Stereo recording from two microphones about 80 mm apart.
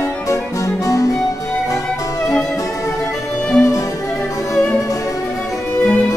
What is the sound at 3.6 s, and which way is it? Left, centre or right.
Music, left.